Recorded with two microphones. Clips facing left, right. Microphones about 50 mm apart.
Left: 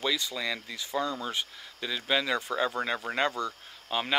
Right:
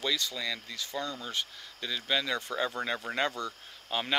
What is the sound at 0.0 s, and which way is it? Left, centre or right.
Speech, centre.